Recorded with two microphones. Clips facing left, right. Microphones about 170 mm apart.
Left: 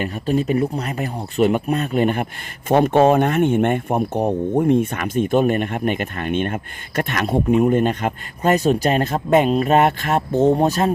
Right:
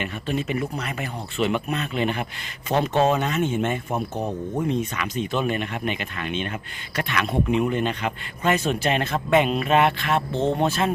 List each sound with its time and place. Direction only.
0.0 s speech: 40° left (ahead or behind)